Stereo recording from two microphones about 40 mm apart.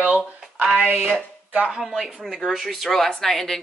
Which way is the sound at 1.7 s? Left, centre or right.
Centre.